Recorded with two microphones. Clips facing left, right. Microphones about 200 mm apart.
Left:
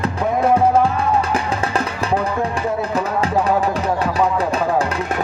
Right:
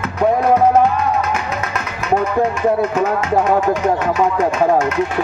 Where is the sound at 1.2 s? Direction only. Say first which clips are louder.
Left 1 dB; 30° left (ahead or behind).